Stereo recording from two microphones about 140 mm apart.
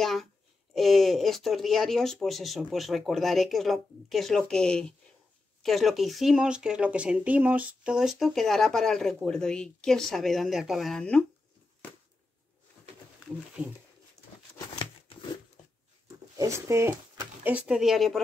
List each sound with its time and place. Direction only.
0.0 s a sound: centre (ahead or behind)
0.7 s speech: centre (ahead or behind)
16.3 s speech: 20° right (ahead or behind); by 18.2 s centre (ahead or behind)